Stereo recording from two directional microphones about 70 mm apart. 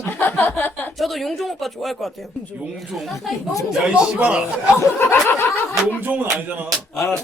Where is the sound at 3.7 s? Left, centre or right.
Centre.